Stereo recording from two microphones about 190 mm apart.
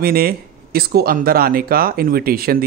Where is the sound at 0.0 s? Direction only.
55° right (ahead or behind).